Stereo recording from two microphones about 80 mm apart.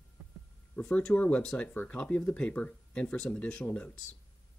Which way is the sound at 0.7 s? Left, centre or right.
Centre.